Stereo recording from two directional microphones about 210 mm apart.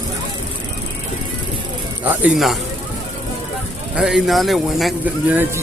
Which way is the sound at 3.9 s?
Centre (ahead or behind).